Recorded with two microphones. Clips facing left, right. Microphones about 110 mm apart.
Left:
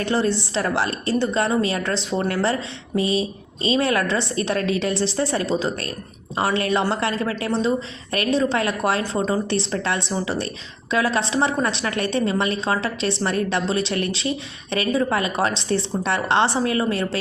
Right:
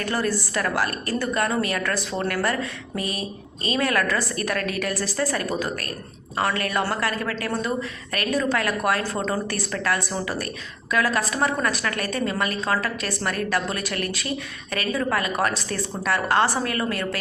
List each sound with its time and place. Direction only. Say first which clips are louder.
0.0 s a woman's voice: left 4 dB; 25° left (ahead or behind)